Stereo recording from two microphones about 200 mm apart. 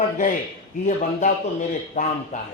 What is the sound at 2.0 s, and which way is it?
Speech, 40° left (ahead or behind).